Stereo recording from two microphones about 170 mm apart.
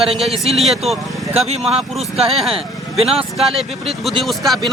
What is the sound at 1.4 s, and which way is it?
Speech, 40° right (ahead or behind).